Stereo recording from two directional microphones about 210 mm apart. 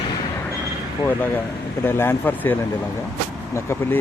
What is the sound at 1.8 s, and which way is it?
Speech, 10° left (ahead or behind).